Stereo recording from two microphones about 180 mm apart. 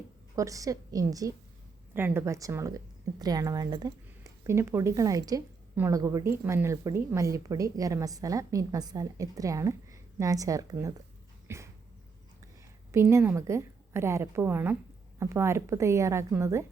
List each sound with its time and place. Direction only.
0.3 s a woman's voice: 20° right (ahead or behind)
11.4 s dog: 15° right (ahead or behind)
12.9 s a woman's voice: 15° right (ahead or behind)